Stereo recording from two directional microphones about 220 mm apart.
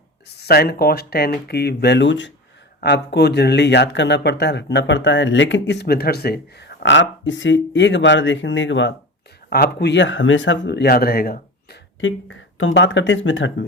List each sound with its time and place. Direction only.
0.3 s speech: 45° left (ahead or behind)
9.5 s speech: 45° left (ahead or behind)
12.0 s speech: 60° left (ahead or behind)